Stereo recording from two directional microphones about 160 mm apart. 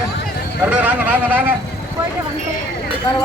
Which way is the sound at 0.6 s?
10° right (ahead or behind).